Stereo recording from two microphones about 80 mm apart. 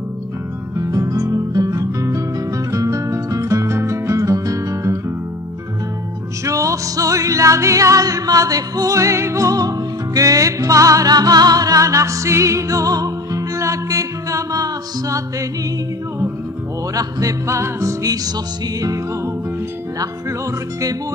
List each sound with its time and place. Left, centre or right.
0.7 s guitar: right
6.4 s music: right
16.9 s speech: right